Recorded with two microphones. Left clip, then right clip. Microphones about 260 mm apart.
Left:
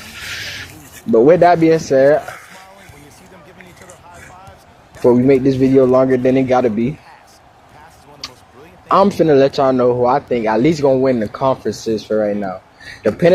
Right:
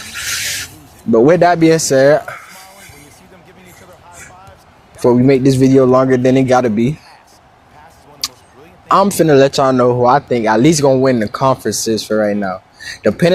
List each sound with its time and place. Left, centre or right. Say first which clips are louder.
1.1 s speech: even; right
5.0 s speech: right 1 dB; right
8.2 s a sound: right 8 dB; right
8.9 s speech: right 1 dB; right